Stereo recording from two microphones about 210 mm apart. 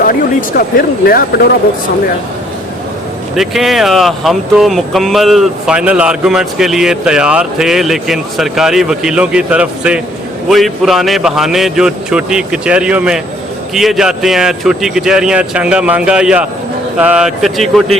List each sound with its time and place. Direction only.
0.0 s speech: 45° left (ahead or behind)
3.3 s speech: centre (ahead or behind)